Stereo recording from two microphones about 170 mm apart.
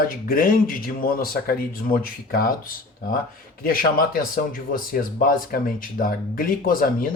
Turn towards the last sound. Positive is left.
turn(degrees=55)  # may be behind; listen again after turning